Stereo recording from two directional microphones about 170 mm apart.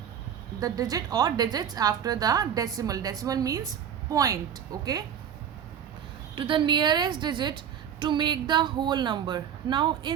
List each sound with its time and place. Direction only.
0.6 s a woman's voice: 20° right (ahead or behind)
6.3 s a woman's voice: 30° right (ahead or behind)